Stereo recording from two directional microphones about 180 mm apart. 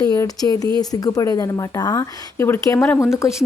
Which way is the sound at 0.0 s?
20° left (ahead or behind).